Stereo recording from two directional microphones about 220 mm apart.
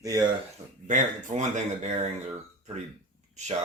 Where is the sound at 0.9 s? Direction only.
35° right (ahead or behind).